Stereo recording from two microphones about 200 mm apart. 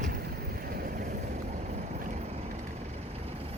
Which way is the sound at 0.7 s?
45° right (ahead or behind).